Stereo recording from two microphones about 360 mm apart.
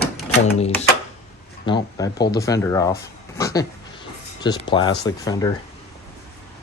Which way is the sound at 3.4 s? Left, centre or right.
Centre.